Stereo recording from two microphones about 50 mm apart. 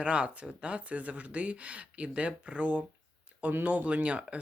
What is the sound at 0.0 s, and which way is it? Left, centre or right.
Speech, right.